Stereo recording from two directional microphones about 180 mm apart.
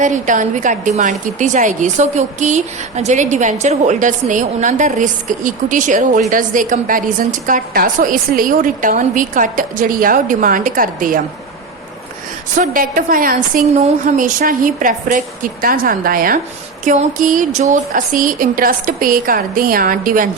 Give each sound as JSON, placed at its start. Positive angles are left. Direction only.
{"t": 0.0, "sound": "a woman's voice", "side_deg": -45}
{"t": 12.5, "sound": "a woman's voice", "side_deg": -50}